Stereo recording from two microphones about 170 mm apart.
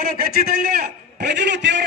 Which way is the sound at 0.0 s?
60° right (ahead or behind).